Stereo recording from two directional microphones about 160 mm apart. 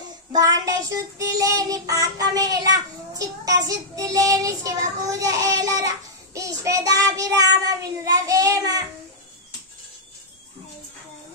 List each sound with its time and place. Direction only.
0.3 s child singing: 20° right (ahead or behind)